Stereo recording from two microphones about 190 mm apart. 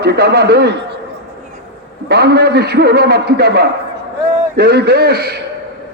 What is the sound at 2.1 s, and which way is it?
A man's voice, 60° right (ahead or behind).